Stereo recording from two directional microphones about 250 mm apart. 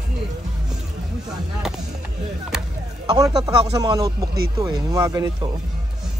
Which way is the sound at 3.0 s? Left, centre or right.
Centre.